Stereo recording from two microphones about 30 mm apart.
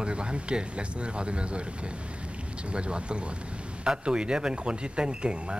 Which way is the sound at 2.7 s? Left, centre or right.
Right.